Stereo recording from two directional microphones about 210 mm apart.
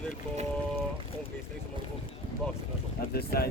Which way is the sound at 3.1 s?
45° left (ahead or behind).